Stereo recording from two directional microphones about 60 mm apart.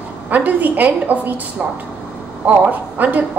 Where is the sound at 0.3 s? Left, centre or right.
Right.